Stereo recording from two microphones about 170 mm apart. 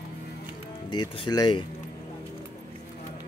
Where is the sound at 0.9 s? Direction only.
25° left (ahead or behind).